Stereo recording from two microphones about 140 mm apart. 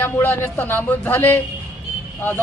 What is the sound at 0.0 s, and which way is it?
Speech, 15° left (ahead or behind).